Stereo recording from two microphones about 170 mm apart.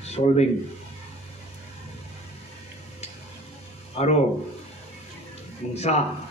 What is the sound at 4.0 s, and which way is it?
Speech, 35° left (ahead or behind).